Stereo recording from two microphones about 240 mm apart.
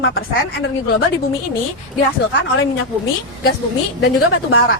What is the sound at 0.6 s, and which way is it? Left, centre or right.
Speech, left.